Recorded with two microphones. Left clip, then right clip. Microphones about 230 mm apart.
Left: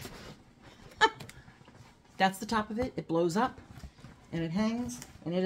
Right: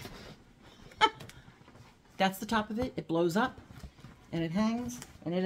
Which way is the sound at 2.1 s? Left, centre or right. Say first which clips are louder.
Left 1 dB; centre.